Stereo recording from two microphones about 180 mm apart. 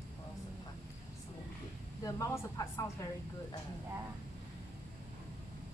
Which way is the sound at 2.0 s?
15° left (ahead or behind).